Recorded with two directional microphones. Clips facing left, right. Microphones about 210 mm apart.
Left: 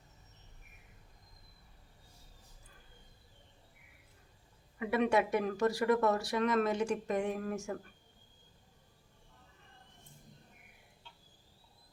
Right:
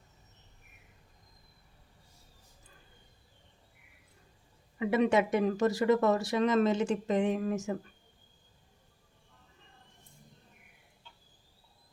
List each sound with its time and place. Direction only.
4.8 s speech: 25° right (ahead or behind)